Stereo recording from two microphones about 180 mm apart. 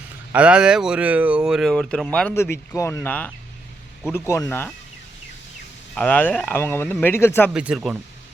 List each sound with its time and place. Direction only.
0.3 s speech: 5° right (ahead or behind); by 4.7 s 15° left (ahead or behind)
6.0 s speech: 10° left (ahead or behind)
7.5 s speech: 5° right (ahead or behind)